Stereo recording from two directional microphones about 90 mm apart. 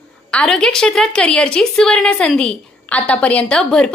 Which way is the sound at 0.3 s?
10° left (ahead or behind).